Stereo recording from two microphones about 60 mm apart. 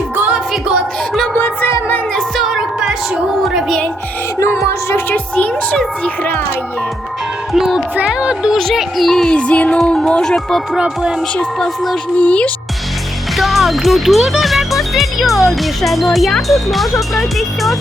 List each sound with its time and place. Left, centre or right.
2.4 s a sound: centre
7.5 s music: centre
8.0 s a sound: centre
8.5 s speech: centre
10.8 s music: centre
12.1 s speech: left
13.3 s speech: centre